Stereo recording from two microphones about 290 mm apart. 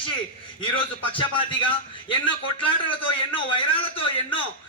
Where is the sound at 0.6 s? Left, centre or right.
Centre.